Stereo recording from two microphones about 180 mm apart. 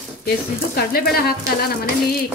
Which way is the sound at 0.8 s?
55° left (ahead or behind).